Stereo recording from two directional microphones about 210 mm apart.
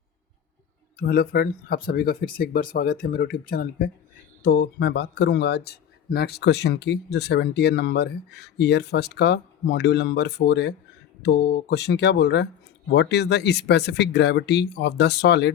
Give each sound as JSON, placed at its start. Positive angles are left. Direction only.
{"t": 0.9, "sound": "speech", "side_deg": 45}
{"t": 4.4, "sound": "speech", "side_deg": 55}